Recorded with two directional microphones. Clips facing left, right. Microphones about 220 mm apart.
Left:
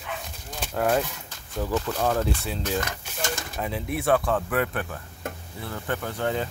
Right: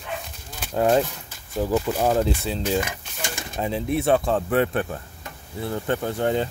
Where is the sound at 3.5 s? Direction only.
25° right (ahead or behind).